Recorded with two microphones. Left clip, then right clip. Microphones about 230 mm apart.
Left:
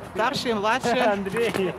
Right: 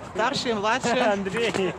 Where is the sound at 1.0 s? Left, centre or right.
Right.